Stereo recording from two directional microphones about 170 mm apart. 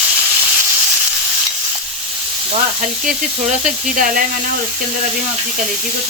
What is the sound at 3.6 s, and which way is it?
Speech, 55° right (ahead or behind).